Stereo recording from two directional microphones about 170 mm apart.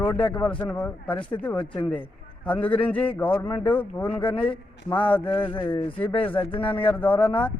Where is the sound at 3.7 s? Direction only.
10° left (ahead or behind).